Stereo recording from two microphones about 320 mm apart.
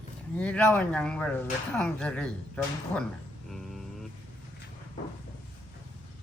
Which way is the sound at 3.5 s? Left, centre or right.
Centre.